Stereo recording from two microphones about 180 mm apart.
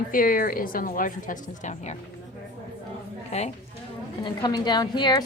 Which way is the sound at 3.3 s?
35° left (ahead or behind).